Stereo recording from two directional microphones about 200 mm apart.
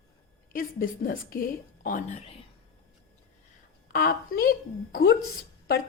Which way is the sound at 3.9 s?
45° left (ahead or behind).